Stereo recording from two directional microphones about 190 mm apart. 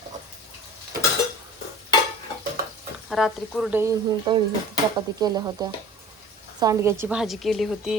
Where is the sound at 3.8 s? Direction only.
20° right (ahead or behind).